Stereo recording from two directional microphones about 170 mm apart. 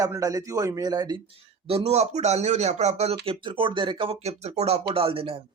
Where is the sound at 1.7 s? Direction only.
40° right (ahead or behind).